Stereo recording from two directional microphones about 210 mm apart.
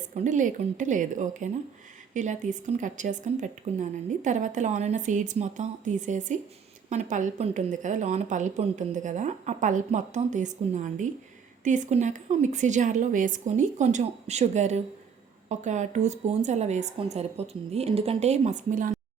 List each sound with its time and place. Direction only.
0.3 s a woman's voice: 35° right (ahead or behind)